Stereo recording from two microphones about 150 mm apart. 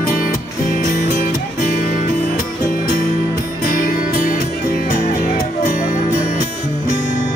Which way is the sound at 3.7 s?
65° left (ahead or behind).